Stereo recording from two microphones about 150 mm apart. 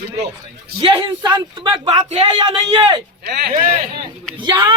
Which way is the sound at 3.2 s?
90° right.